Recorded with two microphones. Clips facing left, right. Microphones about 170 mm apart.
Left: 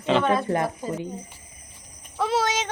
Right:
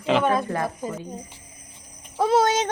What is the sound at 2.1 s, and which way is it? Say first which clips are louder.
Speech: right 5 dB; 45° right (ahead or behind).